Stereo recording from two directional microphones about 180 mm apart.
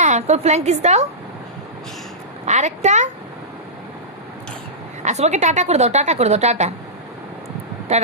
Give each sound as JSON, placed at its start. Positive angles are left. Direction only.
{"t": 0.0, "sound": "a woman's voice", "side_deg": -40}
{"t": 2.5, "sound": "a woman's voice", "side_deg": -40}
{"t": 5.0, "sound": "a woman's voice", "side_deg": -40}